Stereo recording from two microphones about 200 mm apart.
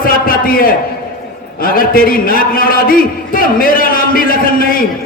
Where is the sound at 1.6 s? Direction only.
45° left (ahead or behind).